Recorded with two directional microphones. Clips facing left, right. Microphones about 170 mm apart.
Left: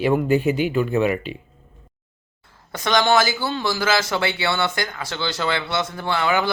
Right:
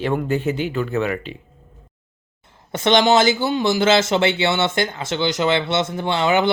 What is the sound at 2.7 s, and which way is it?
A man's voice, 25° right (ahead or behind).